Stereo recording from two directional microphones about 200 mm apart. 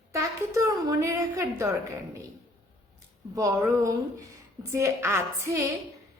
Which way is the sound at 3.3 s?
15° right (ahead or behind).